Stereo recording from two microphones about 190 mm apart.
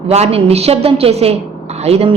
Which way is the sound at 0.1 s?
35° right (ahead or behind).